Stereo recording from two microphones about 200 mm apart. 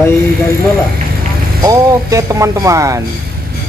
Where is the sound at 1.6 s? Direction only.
15° right (ahead or behind).